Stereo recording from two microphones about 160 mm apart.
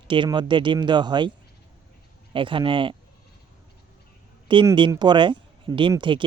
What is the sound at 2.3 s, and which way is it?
Speech, 30° right (ahead or behind).